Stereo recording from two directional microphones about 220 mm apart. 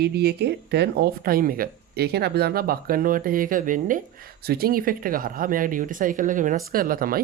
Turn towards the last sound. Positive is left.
turn(degrees=-40)  # may be behind; listen again after turning